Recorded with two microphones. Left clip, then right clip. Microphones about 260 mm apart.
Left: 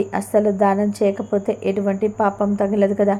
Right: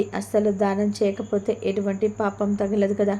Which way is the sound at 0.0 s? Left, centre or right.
Centre.